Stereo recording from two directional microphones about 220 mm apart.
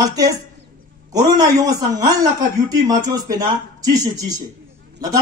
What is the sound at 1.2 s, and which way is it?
Speech, 35° right (ahead or behind).